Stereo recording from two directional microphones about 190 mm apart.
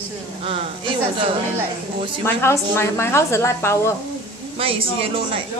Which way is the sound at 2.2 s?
15° left (ahead or behind).